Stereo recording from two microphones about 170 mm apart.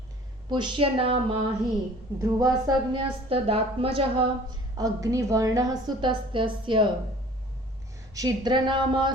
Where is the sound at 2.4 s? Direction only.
25° right (ahead or behind).